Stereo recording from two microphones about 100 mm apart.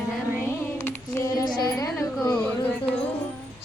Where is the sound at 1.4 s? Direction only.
45° left (ahead or behind).